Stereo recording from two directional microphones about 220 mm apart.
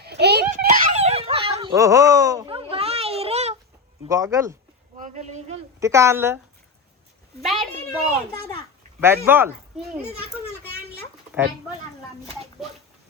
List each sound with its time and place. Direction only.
0.0 s a sound: 50° right (ahead or behind); by 2.5 s 15° right (ahead or behind)
2.5 s a sound: 25° right (ahead or behind)
4.0 s a woman's voice: 15° right (ahead or behind)
4.9 s speech: 35° right (ahead or behind)
5.8 s a woman's voice: 15° right (ahead or behind)
7.4 s a child's voice: centre (ahead or behind)
9.0 s a woman's voice: 10° right (ahead or behind)